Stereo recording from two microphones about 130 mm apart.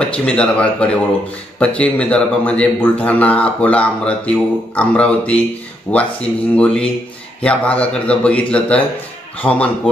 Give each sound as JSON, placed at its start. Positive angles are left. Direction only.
{"t": 0.1, "sound": "a man's voice", "side_deg": 10}